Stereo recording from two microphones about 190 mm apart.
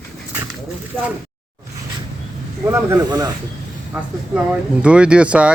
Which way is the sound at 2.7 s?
15° right (ahead or behind).